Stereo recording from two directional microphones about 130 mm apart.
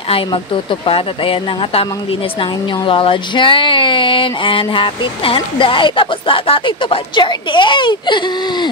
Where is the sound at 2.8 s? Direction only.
40° left (ahead or behind).